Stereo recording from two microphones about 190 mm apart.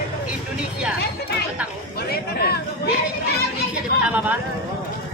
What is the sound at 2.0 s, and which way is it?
Speech, 55° left (ahead or behind).